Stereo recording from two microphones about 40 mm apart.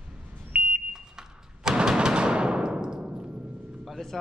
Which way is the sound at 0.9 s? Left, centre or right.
Centre.